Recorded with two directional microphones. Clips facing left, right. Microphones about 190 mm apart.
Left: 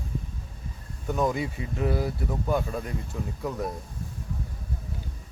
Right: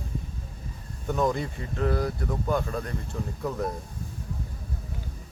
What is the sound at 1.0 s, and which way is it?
Speech, 5° left (ahead or behind).